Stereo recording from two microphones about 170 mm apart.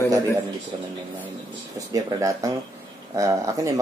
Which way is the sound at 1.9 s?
20° right (ahead or behind).